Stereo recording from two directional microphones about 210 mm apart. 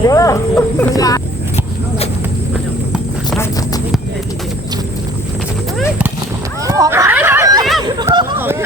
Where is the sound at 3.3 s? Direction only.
15° left (ahead or behind).